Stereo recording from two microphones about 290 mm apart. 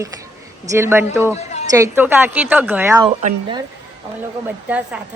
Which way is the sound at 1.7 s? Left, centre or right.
Centre.